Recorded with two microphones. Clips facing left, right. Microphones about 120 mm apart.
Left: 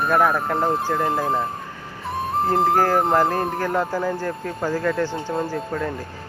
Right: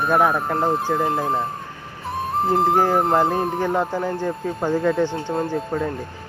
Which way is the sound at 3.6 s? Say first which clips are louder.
Right 1 dB; 20° right (ahead or behind).